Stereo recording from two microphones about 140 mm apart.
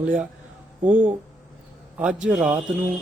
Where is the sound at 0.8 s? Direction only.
10° right (ahead or behind).